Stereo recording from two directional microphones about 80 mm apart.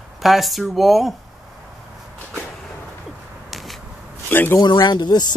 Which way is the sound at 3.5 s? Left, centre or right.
Centre.